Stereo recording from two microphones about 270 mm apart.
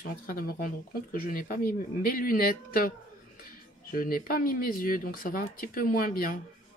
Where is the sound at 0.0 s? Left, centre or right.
Left.